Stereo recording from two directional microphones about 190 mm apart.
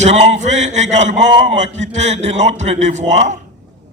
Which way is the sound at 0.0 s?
35° right (ahead or behind).